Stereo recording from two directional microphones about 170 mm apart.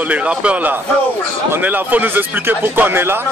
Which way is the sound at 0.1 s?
5° right (ahead or behind).